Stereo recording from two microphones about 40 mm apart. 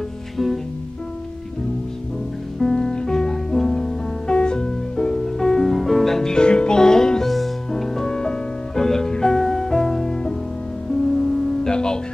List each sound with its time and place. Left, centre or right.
2.6 s music: centre
3.6 s music: centre
4.3 s music: left
6.3 s music: left
7.2 s music: centre
11.6 s music: centre